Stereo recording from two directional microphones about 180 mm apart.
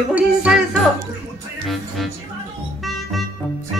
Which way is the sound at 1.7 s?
Centre (ahead or behind).